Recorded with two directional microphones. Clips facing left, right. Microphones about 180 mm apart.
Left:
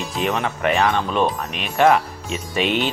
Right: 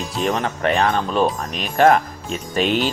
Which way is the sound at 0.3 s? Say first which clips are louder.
Right 1 dB; 40° right (ahead or behind).